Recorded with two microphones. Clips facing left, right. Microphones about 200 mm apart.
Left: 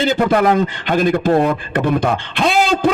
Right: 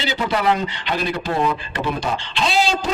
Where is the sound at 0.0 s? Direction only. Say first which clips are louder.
Left 7 dB; 50° left (ahead or behind).